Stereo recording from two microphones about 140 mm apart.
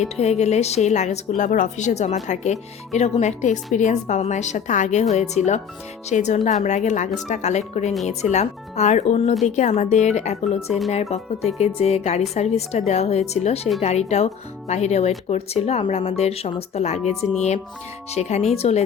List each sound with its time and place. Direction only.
0.0 s speech: 55° left (ahead or behind)
1.4 s speech: 65° left (ahead or behind)
10.7 s speech: centre (ahead or behind)
11.6 s speech: 50° left (ahead or behind)